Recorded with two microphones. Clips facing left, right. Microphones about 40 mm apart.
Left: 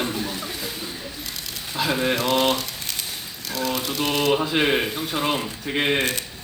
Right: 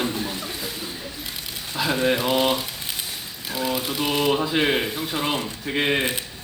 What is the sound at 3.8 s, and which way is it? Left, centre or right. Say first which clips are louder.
Mantra: left 1 dB; right.